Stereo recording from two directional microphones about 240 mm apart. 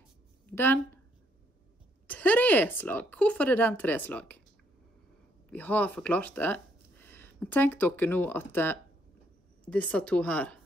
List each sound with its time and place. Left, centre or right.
0.5 s speech: centre
2.0 s speech: centre
5.5 s speech: centre